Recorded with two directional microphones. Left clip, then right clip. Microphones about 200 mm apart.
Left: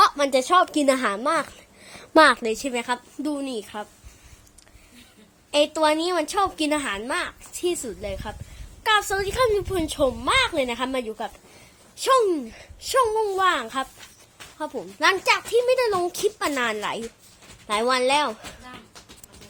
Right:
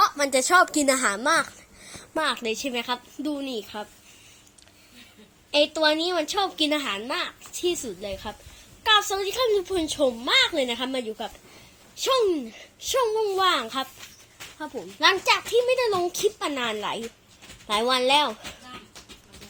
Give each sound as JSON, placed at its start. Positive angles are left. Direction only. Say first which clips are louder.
{"t": 0.0, "sound": "speech", "louder": "left 3 dB", "side_deg": 15}
{"t": 2.1, "sound": "a woman's voice", "louder": "left 11 dB", "side_deg": 45}
{"t": 2.4, "sound": "a woman's voice", "louder": "left 2 dB", "side_deg": 10}
{"t": 5.5, "sound": "a woman's voice", "louder": "left 1 dB", "side_deg": 10}
{"t": 14.6, "sound": "a woman's voice", "louder": "left 4 dB", "side_deg": 15}
{"t": 15.2, "sound": "a woman's voice", "louder": "left 1 dB", "side_deg": 5}